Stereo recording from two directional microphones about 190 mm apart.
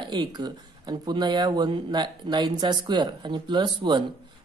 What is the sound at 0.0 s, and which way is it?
Speech, 25° right (ahead or behind).